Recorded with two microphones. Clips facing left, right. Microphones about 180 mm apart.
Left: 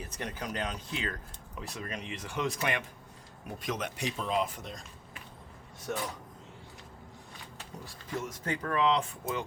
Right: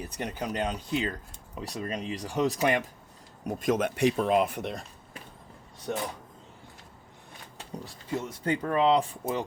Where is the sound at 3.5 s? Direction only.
45° right (ahead or behind); by 4.8 s 65° right (ahead or behind).